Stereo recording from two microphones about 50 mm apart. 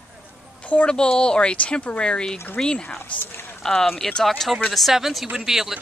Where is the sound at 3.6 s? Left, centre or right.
Centre.